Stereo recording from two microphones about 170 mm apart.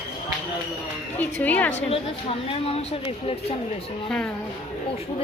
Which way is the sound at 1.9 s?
35° left (ahead or behind).